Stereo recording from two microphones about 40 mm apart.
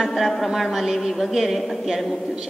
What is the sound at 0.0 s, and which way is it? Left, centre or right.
A woman's voice, centre.